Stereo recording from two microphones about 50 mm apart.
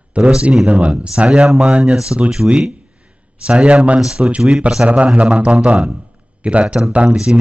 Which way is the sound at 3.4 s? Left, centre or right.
Right.